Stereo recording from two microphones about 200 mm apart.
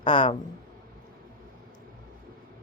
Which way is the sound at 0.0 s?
25° left (ahead or behind).